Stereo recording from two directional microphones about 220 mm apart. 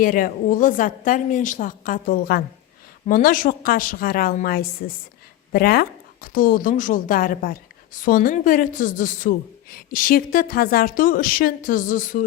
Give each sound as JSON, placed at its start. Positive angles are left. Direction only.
{"t": 0.0, "sound": "a woman's voice", "side_deg": 40}